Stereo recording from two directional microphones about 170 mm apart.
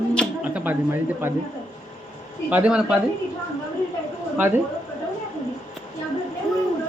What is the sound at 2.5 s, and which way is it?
Speech, 5° right (ahead or behind).